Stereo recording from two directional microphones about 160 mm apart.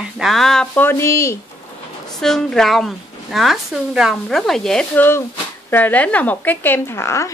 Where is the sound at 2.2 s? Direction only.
5° left (ahead or behind).